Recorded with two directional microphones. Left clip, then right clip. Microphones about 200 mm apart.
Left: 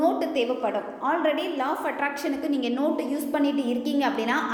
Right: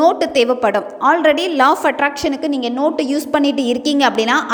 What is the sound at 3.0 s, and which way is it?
A woman's voice, 45° right (ahead or behind).